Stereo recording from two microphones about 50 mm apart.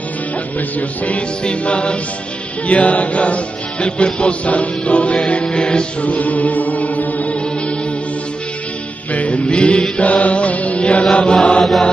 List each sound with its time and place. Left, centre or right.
0.6 s music: left
6.0 s music: left
9.1 s music: left